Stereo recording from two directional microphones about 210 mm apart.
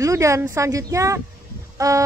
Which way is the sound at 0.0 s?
15° right (ahead or behind).